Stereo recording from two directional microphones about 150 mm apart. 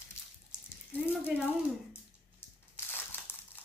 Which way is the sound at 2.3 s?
15° left (ahead or behind).